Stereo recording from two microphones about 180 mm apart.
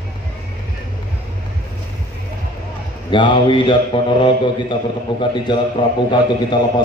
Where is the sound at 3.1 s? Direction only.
25° left (ahead or behind).